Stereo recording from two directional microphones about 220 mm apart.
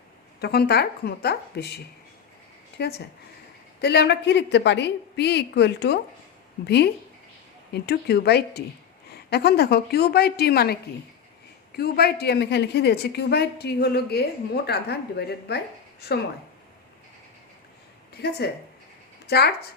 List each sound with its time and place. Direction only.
0.3 s a woman's voice: 45° left (ahead or behind)
11.8 s a woman's voice: 45° left (ahead or behind)
18.1 s a woman's voice: 45° left (ahead or behind)